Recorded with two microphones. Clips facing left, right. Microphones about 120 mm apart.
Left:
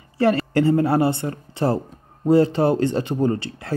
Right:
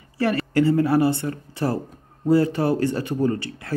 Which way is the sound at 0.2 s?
30° left (ahead or behind).